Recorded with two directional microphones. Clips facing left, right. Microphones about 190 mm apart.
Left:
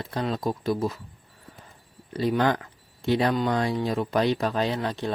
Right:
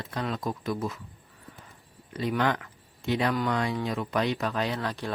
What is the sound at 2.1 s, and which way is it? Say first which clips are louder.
Speech: left 4 dB; 35° left (ahead or behind).